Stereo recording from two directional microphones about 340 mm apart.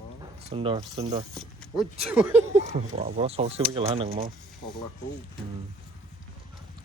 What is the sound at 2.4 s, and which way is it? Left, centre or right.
Speech, centre.